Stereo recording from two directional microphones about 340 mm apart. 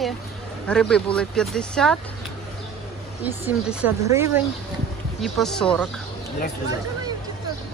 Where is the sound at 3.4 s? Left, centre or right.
Centre.